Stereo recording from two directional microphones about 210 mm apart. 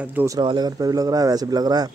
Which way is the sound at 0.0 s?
10° right (ahead or behind).